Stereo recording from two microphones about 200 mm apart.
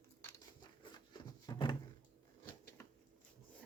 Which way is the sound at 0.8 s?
25° left (ahead or behind).